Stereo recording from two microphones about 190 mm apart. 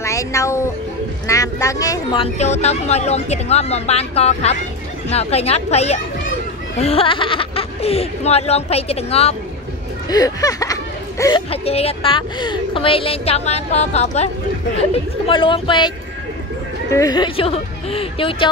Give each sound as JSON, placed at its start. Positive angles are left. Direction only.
{"t": 0.0, "sound": "speech", "side_deg": 15}
{"t": 2.3, "sound": "a woman's voice", "side_deg": 35}
{"t": 10.0, "sound": "speech", "side_deg": 20}
{"t": 11.5, "sound": "a woman's voice", "side_deg": 30}
{"t": 16.9, "sound": "a woman's voice", "side_deg": 20}